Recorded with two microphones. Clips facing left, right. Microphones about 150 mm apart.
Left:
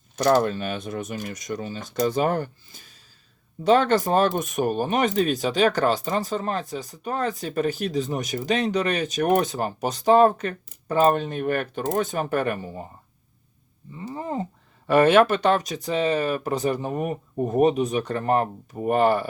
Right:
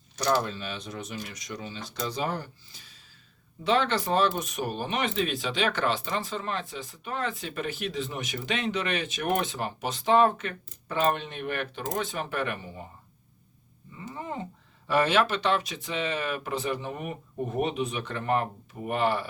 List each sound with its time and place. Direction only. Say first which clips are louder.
0.2 s speech: left 7 dB; 55° left (ahead or behind)
14.0 s speech: left 6 dB; 35° left (ahead or behind)
14.8 s speech: left 8 dB; 55° left (ahead or behind)